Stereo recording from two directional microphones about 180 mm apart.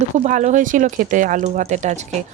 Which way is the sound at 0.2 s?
40° right (ahead or behind).